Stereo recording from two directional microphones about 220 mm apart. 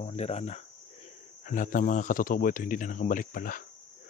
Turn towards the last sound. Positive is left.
turn(degrees=40)  # may be behind; listen again after turning